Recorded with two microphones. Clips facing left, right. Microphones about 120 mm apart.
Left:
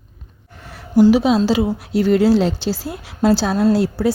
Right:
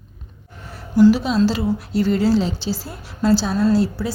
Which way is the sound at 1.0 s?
70° left (ahead or behind).